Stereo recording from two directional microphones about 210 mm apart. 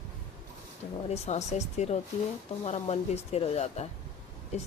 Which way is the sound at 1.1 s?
30° left (ahead or behind).